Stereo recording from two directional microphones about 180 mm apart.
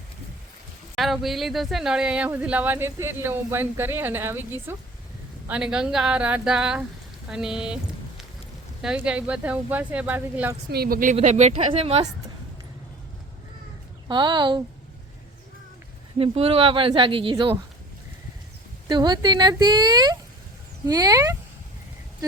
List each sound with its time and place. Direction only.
0.9 s a woman's voice: centre (ahead or behind)
8.8 s speech: 5° right (ahead or behind)
10.7 s a woman's voice: 55° right (ahead or behind); by 12.0 s 35° right (ahead or behind)
14.1 s speech: 25° right (ahead or behind)
16.1 s speech: 30° right (ahead or behind)
18.9 s speech: 25° right (ahead or behind)